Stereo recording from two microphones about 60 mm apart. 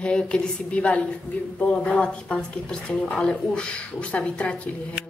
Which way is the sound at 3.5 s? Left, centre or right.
Centre.